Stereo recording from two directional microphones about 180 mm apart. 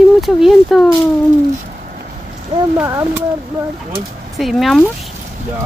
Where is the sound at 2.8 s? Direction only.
15° right (ahead or behind).